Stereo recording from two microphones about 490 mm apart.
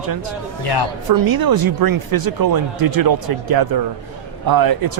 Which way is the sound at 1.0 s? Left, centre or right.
Right.